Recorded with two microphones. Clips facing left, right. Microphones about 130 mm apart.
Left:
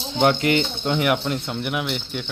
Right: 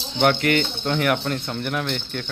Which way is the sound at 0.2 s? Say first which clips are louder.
Left 1 dB; 20° left (ahead or behind).